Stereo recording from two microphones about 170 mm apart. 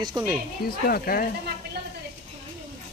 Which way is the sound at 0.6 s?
60° left (ahead or behind).